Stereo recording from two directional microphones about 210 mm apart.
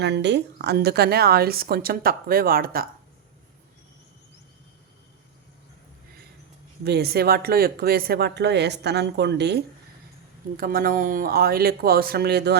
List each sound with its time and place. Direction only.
0.0 s speech: 55° right (ahead or behind)
6.8 s speech: 50° right (ahead or behind)
10.6 s speech: 40° right (ahead or behind)